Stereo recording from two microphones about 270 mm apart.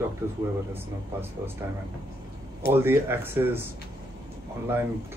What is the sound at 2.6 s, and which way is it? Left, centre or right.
Speech, centre.